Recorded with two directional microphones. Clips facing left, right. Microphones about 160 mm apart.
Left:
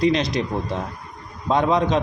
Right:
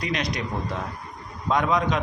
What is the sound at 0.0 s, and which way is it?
A man's voice, 30° left (ahead or behind).